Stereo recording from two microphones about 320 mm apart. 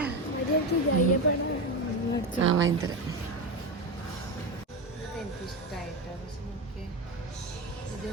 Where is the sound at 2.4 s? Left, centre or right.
Right.